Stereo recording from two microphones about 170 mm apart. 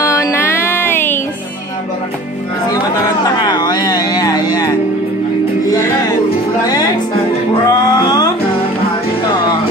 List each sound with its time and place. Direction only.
0.0 s music: 15° left (ahead or behind)
3.3 s music: 25° left (ahead or behind)